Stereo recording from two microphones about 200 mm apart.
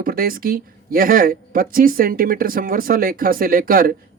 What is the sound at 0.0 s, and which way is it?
Speech, 50° right (ahead or behind).